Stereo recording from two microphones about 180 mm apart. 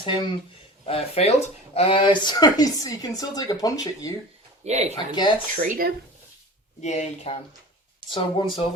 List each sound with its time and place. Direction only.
0.0 s speech: 30° left (ahead or behind)
4.6 s speech: 40° right (ahead or behind)
4.9 s speech: 25° left (ahead or behind)
5.6 s speech: 50° right (ahead or behind)
6.8 s speech: 40° left (ahead or behind)
8.1 s speech: 25° left (ahead or behind)